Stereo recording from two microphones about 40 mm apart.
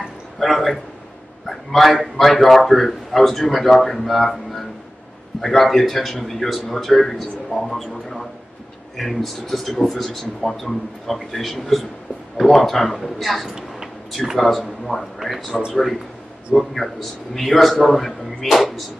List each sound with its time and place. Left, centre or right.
0.4 s a man's voice: centre
13.5 s a sound: centre
14.3 s a man's voice: centre